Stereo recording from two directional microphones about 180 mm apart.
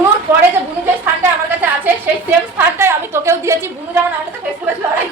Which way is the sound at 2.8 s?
15° right (ahead or behind).